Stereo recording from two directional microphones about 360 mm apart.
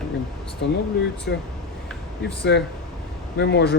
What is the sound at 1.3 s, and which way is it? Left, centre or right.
Speech, left.